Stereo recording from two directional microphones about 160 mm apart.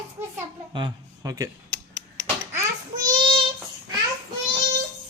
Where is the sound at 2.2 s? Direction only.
20° right (ahead or behind).